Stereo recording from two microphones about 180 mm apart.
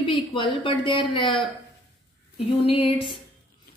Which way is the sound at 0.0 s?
25° left (ahead or behind).